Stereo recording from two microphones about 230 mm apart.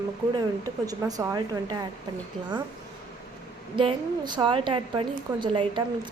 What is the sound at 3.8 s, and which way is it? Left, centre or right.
A woman's voice, right.